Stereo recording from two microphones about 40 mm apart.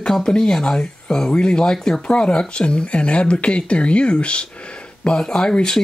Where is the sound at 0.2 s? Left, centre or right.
Centre.